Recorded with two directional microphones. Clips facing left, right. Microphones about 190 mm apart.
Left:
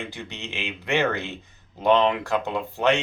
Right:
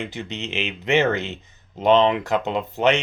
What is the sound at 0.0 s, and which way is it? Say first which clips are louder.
Speech: right 5 dB; 20° right (ahead or behind).